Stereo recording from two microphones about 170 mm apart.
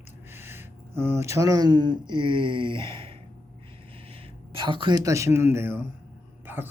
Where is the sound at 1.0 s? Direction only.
15° right (ahead or behind); by 3.2 s 30° right (ahead or behind).